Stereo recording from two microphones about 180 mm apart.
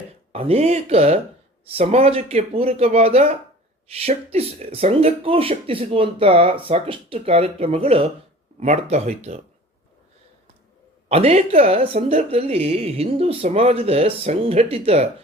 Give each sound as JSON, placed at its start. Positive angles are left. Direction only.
{"t": 0.3, "sound": "speech", "side_deg": -35}
{"t": 11.1, "sound": "speech", "side_deg": -35}